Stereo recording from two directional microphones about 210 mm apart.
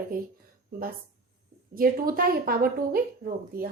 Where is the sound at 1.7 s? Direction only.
45° right (ahead or behind).